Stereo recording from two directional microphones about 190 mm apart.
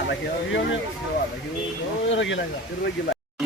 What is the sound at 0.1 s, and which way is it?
Speech, 70° left (ahead or behind).